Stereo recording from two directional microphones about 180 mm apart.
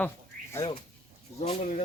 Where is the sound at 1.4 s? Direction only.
40° left (ahead or behind).